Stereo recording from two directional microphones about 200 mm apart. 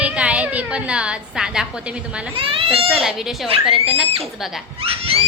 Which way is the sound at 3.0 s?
Centre (ahead or behind).